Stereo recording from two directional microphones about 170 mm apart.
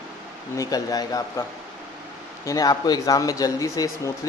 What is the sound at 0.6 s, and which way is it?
Speech, 20° left (ahead or behind).